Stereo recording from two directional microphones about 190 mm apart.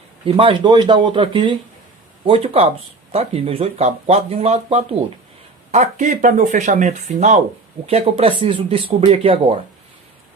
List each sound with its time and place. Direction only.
0.3 s speech: 30° right (ahead or behind)